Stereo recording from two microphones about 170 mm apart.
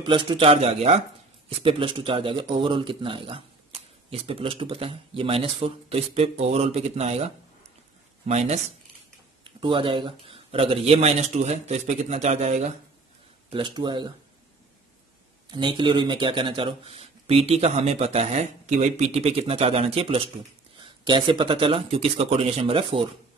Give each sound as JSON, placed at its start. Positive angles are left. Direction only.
{"t": 0.0, "sound": "speech", "side_deg": -25}
{"t": 9.4, "sound": "speech", "side_deg": -30}
{"t": 13.5, "sound": "speech", "side_deg": -30}
{"t": 15.4, "sound": "speech", "side_deg": -25}